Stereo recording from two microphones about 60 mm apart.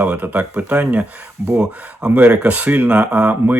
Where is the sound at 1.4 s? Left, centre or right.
Centre.